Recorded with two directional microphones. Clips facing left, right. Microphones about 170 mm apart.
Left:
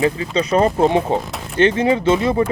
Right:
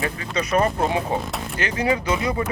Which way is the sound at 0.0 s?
25° left (ahead or behind).